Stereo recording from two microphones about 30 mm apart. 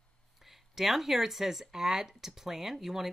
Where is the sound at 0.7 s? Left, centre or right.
Centre.